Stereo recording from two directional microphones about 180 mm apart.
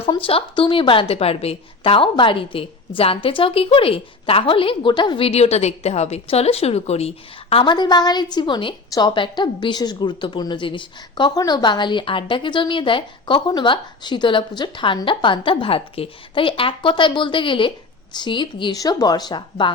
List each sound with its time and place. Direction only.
0.0 s a woman's voice: 30° left (ahead or behind)